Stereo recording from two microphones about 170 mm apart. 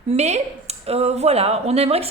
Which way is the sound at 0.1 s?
40° right (ahead or behind).